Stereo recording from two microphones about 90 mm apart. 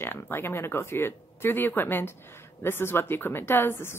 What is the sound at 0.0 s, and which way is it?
A woman's voice, 25° left (ahead or behind).